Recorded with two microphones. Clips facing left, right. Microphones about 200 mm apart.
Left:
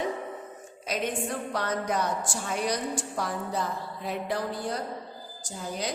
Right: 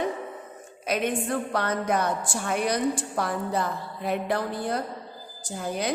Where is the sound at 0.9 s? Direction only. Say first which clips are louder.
Right 4 dB; 55° right (ahead or behind).